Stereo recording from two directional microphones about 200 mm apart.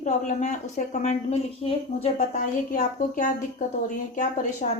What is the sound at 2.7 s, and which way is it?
A woman's voice, 40° left (ahead or behind).